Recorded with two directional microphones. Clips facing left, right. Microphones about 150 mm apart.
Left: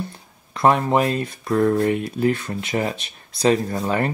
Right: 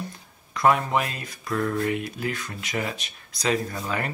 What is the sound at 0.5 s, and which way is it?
Speech, 30° left (ahead or behind).